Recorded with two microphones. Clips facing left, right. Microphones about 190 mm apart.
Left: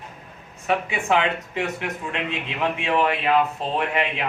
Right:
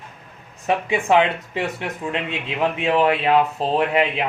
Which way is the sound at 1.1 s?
35° right (ahead or behind).